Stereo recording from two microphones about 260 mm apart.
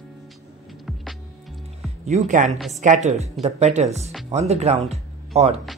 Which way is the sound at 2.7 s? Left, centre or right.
Right.